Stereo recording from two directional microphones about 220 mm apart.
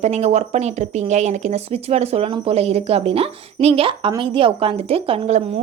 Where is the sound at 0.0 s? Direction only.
30° right (ahead or behind).